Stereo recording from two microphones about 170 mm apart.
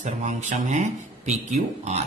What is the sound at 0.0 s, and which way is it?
A man's voice, 45° right (ahead or behind).